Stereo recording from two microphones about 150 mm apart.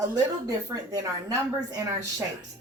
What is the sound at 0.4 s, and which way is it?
A woman's voice, 20° right (ahead or behind).